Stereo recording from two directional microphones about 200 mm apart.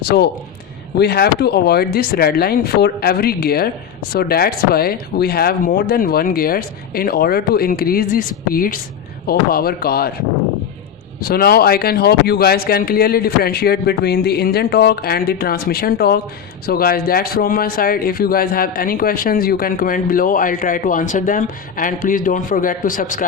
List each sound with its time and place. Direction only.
0.1 s speech: 50° left (ahead or behind)
11.2 s speech: 50° left (ahead or behind)